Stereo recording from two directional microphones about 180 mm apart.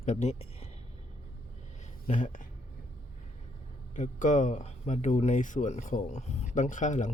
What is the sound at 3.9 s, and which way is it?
Speech, 40° left (ahead or behind).